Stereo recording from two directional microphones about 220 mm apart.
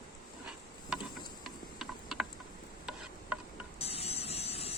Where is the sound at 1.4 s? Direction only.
Centre (ahead or behind).